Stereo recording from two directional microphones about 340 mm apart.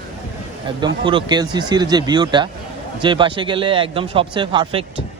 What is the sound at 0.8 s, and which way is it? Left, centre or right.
A man's voice, centre.